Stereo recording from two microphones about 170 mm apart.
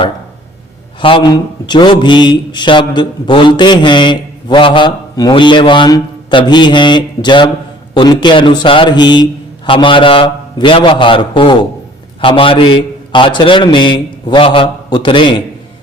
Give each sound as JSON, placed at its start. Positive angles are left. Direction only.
{"t": 1.0, "sound": "speech", "side_deg": 30}